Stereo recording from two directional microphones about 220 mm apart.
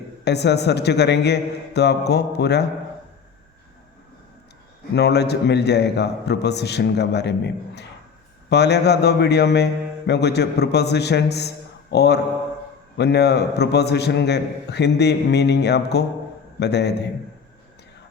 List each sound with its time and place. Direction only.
0.3 s a man's voice: 50° left (ahead or behind)
4.9 s a man's voice: 50° left (ahead or behind)